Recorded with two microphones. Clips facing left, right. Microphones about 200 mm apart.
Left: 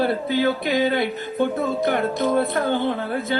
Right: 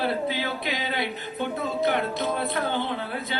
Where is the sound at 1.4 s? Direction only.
45° left (ahead or behind).